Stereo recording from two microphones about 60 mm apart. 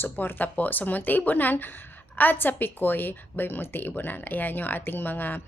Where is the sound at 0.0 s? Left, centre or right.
Left.